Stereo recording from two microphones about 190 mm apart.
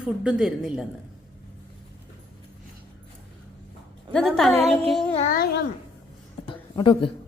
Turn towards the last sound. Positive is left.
turn(degrees=25)  # may be behind; listen again after turning